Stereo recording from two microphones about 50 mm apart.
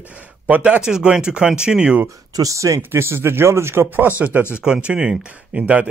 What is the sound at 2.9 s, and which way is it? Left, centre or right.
Speech, right.